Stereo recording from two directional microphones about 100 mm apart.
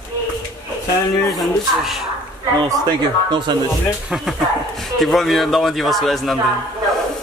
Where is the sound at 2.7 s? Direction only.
45° right (ahead or behind).